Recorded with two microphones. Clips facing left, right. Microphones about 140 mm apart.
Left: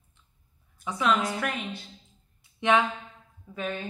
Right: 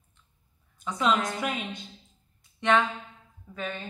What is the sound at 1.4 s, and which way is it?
Speech, 20° right (ahead or behind).